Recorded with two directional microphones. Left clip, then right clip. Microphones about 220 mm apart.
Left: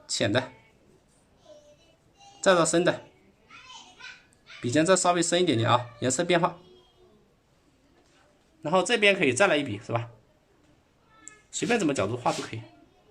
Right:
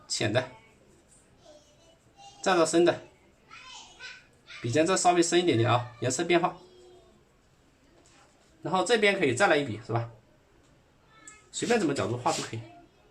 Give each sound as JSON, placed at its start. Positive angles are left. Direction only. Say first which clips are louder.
{"t": 0.1, "sound": "speech", "louder": "left 2 dB", "side_deg": 55}
{"t": 2.4, "sound": "speech", "louder": "left 2 dB", "side_deg": 55}
{"t": 4.6, "sound": "speech", "louder": "left 2 dB", "side_deg": 55}
{"t": 8.6, "sound": "speech", "louder": "left 2 dB", "side_deg": 40}
{"t": 11.7, "sound": "speech", "louder": "left 1 dB", "side_deg": 35}